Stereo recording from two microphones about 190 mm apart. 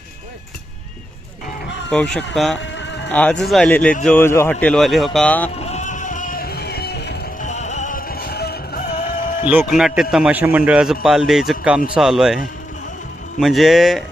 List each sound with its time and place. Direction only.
1.9 s speech: 5° left (ahead or behind)
2.6 s music: 70° left (ahead or behind)
3.1 s speech: 5° left (ahead or behind)
5.6 s music: 40° left (ahead or behind); by 7.2 s 60° left (ahead or behind)
7.3 s music: 40° left (ahead or behind)
9.5 s speech: 5° right (ahead or behind)